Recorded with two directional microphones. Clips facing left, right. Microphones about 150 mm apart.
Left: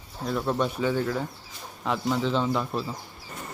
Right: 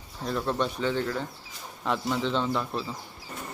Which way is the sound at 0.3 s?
5° left (ahead or behind).